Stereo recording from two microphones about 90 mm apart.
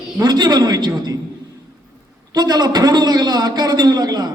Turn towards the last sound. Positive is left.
turn(degrees=-45)  # may be behind; listen again after turning